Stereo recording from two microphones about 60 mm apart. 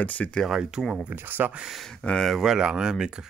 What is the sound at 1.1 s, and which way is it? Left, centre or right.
Speech, right.